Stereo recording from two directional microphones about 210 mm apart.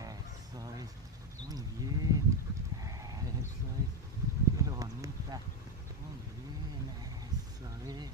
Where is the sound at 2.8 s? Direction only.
15° right (ahead or behind).